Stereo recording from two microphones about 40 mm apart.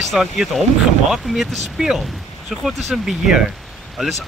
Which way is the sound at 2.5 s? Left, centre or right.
Centre.